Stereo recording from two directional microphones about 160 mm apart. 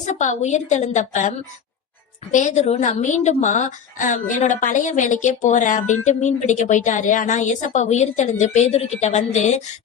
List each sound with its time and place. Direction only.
0.0 s a woman's voice: 50° left (ahead or behind)
2.3 s a woman's voice: 50° left (ahead or behind)